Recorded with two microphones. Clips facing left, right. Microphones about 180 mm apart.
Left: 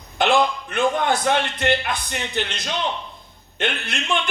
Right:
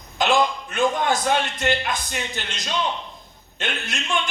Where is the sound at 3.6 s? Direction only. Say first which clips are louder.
Left 4 dB; 60° left (ahead or behind).